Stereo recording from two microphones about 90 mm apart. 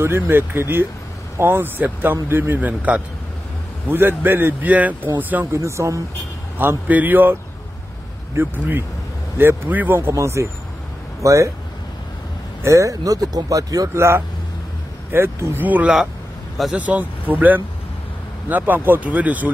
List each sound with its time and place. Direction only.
0.0 s speech: 25° right (ahead or behind)
4.2 s speech: 20° right (ahead or behind)
5.4 s speech: 35° right (ahead or behind)
6.6 s speech: 20° right (ahead or behind)
8.4 s speech: 25° right (ahead or behind)
12.6 s speech: 35° right (ahead or behind); by 19.5 s 15° right (ahead or behind)